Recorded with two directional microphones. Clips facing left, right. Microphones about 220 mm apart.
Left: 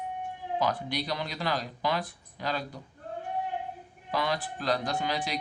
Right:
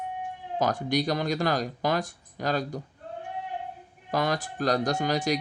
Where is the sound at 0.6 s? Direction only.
45° right (ahead or behind).